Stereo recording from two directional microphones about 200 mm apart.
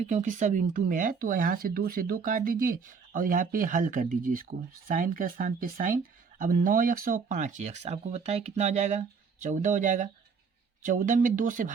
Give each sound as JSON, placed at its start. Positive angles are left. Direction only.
{"t": 0.1, "sound": "speech", "side_deg": -35}